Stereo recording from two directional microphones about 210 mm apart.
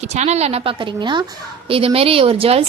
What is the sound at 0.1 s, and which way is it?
A woman's voice, 30° right (ahead or behind).